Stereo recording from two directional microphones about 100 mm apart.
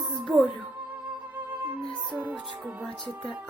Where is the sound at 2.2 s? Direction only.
15° right (ahead or behind).